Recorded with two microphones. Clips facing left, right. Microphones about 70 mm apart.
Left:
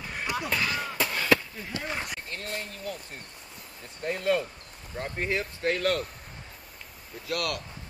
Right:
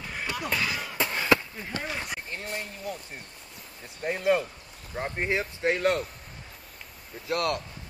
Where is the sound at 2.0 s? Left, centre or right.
Centre.